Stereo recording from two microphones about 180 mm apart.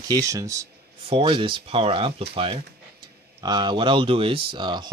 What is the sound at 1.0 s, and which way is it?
Speech, 30° right (ahead or behind).